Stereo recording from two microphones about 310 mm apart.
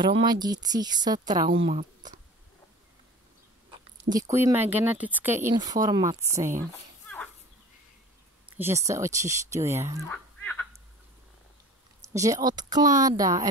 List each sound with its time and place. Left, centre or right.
0.2 s speech: centre
4.2 s speech: centre
8.5 s speech: centre
10.0 s a sound: centre
12.0 s speech: centre